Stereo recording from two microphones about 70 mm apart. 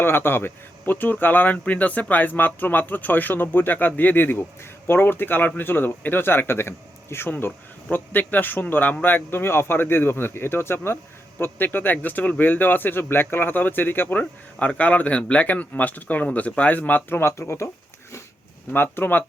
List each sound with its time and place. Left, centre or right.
0.0 s speech: left
18.7 s speech: left